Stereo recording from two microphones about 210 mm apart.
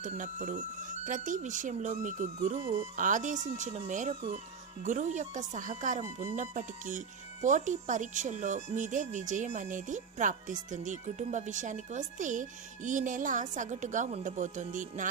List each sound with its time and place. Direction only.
0.0 s speech: 35° right (ahead or behind)